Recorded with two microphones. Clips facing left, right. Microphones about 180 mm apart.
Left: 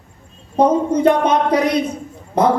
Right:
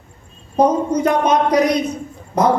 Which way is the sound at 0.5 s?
30° left (ahead or behind).